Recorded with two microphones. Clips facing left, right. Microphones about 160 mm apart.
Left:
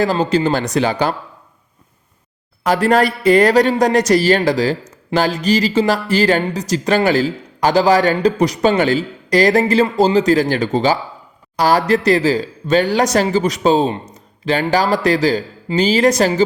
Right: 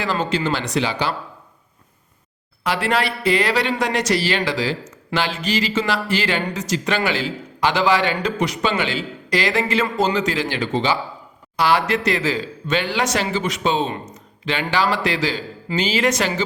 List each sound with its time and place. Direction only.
0.0 s speech: 40° left (ahead or behind)
2.6 s a man's voice: 45° left (ahead or behind)